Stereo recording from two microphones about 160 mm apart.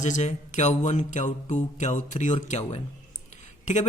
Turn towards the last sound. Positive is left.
turn(degrees=45)  # may be behind; listen again after turning